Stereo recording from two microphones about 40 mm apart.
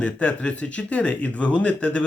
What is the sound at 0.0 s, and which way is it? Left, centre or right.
Speech, left.